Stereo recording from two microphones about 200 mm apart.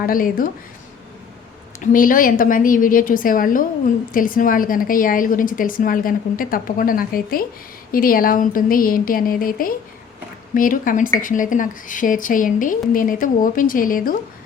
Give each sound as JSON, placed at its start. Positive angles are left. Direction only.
{"t": 0.0, "sound": "a woman's voice", "side_deg": 45}
{"t": 1.8, "sound": "a woman's voice", "side_deg": 45}